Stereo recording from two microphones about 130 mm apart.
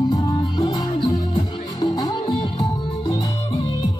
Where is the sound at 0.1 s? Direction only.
30° left (ahead or behind).